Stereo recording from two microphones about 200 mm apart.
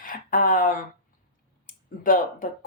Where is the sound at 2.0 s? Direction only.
45° left (ahead or behind).